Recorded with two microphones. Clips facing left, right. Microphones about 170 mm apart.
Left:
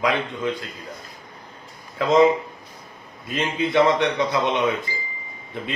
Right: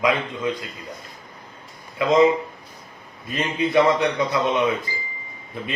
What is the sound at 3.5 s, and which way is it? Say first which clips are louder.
A man's voice: right 1 dB; 25° left (ahead or behind).